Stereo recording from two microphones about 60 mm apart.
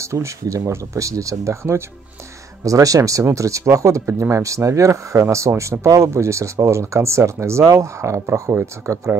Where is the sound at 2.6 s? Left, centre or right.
Right.